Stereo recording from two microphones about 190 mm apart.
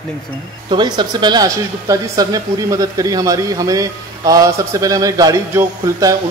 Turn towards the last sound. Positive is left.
turn(degrees=-15)  # may be behind; listen again after turning